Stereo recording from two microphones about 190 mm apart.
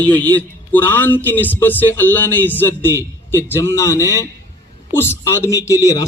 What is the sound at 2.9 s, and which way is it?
Speech, 15° right (ahead or behind).